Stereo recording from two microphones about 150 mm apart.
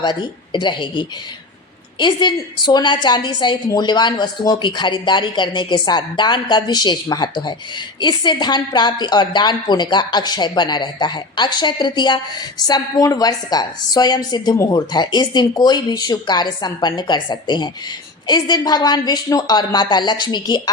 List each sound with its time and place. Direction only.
0.0 s a woman's voice: 30° left (ahead or behind)